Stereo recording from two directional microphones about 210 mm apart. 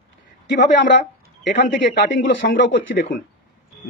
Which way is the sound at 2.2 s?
60° left (ahead or behind).